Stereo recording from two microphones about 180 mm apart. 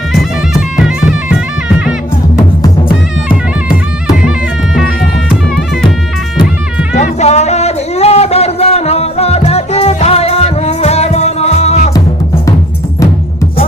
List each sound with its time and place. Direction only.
0.1 s bagpipes: centre (ahead or behind)
4.2 s music: 5° right (ahead or behind)
6.9 s music: 40° left (ahead or behind)